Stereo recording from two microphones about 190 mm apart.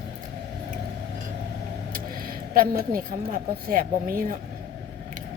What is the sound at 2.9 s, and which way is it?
Speech, 45° right (ahead or behind).